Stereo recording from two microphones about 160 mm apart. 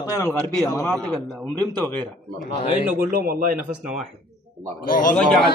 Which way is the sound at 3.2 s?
65° right (ahead or behind).